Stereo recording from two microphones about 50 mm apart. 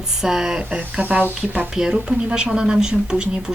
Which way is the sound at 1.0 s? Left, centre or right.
Right.